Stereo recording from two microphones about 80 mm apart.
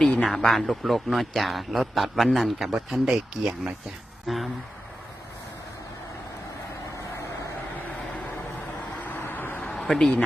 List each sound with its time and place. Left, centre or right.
0.0 s a man's voice: centre
0.3 s a man's voice: centre
4.3 s a man's voice: centre
9.0 s vehicle: left
9.7 s speech: centre